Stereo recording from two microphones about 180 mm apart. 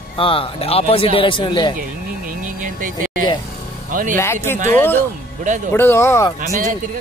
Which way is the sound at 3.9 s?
50° right (ahead or behind).